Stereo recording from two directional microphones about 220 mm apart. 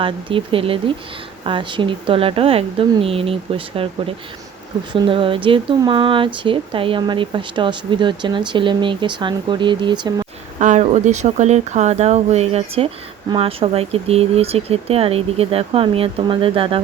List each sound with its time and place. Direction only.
0.0 s speech: 25° right (ahead or behind)
10.6 s speech: 35° right (ahead or behind)